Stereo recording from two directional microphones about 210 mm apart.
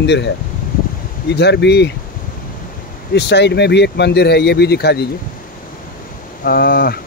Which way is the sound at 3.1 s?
55° left (ahead or behind).